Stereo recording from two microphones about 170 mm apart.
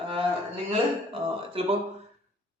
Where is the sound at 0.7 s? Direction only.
35° right (ahead or behind).